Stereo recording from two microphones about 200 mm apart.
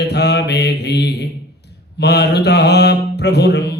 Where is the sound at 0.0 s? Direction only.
55° left (ahead or behind).